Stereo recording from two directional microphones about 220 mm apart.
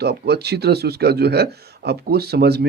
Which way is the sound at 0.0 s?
45° right (ahead or behind).